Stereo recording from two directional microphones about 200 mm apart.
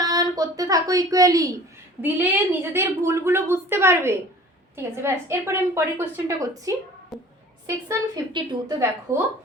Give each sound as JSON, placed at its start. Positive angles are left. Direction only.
{"t": 0.0, "sound": "a sound", "side_deg": -20}
{"t": 2.0, "sound": "a woman's voice", "side_deg": -10}
{"t": 7.1, "sound": "speech", "side_deg": 0}
{"t": 7.9, "sound": "a woman's voice", "side_deg": -20}